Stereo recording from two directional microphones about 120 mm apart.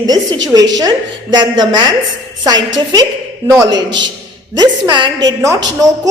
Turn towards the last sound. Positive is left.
turn(degrees=-25)  # may be behind; listen again after turning